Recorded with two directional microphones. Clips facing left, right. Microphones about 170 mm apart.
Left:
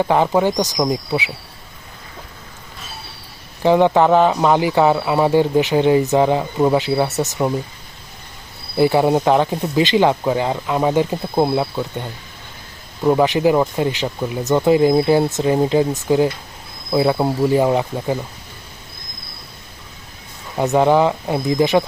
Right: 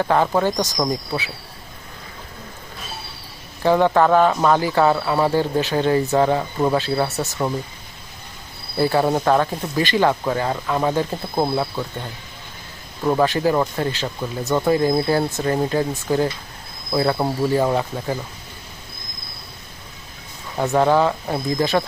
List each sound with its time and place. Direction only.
0.0 s speech: 15° left (ahead or behind)
3.6 s speech: 15° left (ahead or behind)
8.8 s speech: 15° left (ahead or behind)
13.1 s speech: 15° left (ahead or behind)
20.6 s speech: 15° left (ahead or behind)